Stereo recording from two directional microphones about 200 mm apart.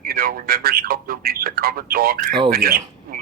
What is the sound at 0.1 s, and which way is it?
A man's voice, 50° right (ahead or behind).